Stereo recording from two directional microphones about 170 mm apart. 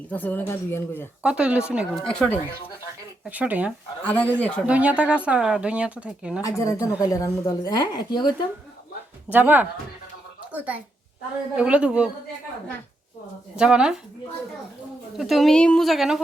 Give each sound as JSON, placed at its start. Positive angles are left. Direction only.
{"t": 0.1, "sound": "speech", "side_deg": 10}
{"t": 1.2, "sound": "speech", "side_deg": -5}
{"t": 3.2, "sound": "speech", "side_deg": -10}
{"t": 4.0, "sound": "speech", "side_deg": 10}
{"t": 4.6, "sound": "speech", "side_deg": -5}
{"t": 6.4, "sound": "speech", "side_deg": 20}
{"t": 9.3, "sound": "speech", "side_deg": -10}
{"t": 13.6, "sound": "speech", "side_deg": -5}
{"t": 15.2, "sound": "speech", "side_deg": 0}